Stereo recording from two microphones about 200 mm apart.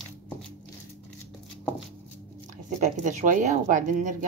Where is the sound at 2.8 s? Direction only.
35° right (ahead or behind).